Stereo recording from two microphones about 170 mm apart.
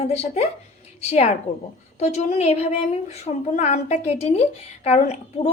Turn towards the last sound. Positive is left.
turn(degrees=40)  # may be behind; listen again after turning